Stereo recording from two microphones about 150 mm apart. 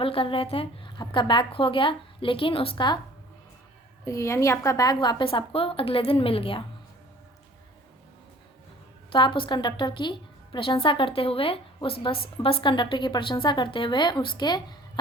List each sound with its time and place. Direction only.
0.0 s a woman's voice: 35° left (ahead or behind)
4.0 s a woman's voice: 20° left (ahead or behind); by 6.7 s 35° left (ahead or behind)
9.1 s a woman's voice: 35° left (ahead or behind)